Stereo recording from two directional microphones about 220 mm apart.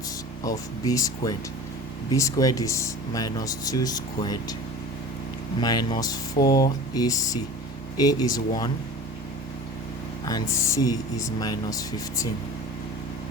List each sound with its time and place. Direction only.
0.4 s speech: 15° left (ahead or behind)
5.5 s speech: 20° left (ahead or behind)
10.2 s speech: 15° left (ahead or behind)